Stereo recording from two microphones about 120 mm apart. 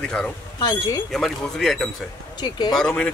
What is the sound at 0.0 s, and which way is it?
Speech, 5° left (ahead or behind).